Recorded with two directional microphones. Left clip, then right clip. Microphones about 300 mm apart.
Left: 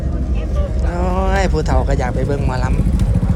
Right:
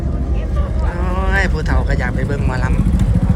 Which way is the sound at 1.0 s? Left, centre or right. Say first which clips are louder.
Left 1 dB; centre.